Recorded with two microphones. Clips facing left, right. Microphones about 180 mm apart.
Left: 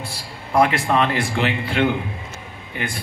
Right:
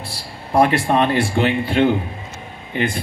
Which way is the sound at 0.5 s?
30° right (ahead or behind).